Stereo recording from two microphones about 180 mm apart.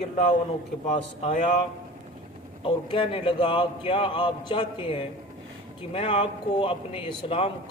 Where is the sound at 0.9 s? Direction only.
35° left (ahead or behind).